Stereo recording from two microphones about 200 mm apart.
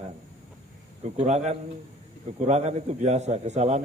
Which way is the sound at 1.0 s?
35° right (ahead or behind).